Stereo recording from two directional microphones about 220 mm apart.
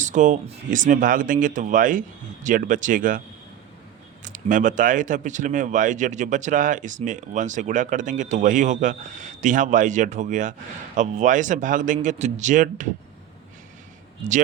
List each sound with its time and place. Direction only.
0.0 s speech: 35° right (ahead or behind)
4.2 s speech: 35° right (ahead or behind)